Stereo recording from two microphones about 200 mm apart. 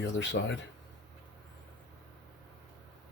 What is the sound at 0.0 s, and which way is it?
Speech, 65° left (ahead or behind).